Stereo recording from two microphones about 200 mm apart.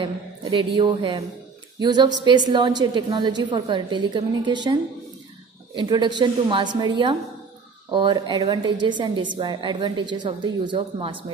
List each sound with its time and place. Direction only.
0.0 s a woman's voice: 25° right (ahead or behind)
5.8 s a woman's voice: 20° right (ahead or behind)